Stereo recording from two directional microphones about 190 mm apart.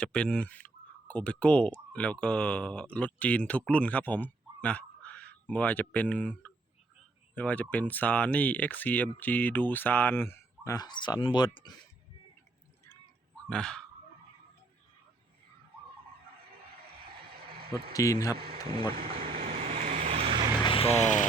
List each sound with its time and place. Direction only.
0.0 s speech: 5° left (ahead or behind); by 11.8 s 20° left (ahead or behind)
13.5 s speech: 5° left (ahead or behind)
17.1 s a sound: 55° right (ahead or behind)
17.9 s speech: 15° left (ahead or behind)
18.9 s speech: 30° right (ahead or behind)
19.5 s vehicle: 35° right (ahead or behind)
20.6 s vehicle: 25° left (ahead or behind)